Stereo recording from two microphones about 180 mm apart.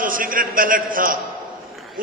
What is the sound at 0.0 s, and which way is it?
A man's voice, 50° right (ahead or behind).